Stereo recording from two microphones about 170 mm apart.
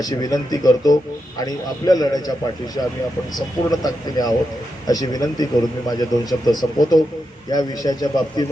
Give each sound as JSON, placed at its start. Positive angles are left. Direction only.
{"t": 0.0, "sound": "speech", "side_deg": 20}
{"t": 3.3, "sound": "speech", "side_deg": 20}